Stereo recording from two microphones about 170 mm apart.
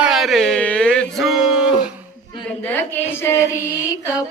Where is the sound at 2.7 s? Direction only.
10° left (ahead or behind).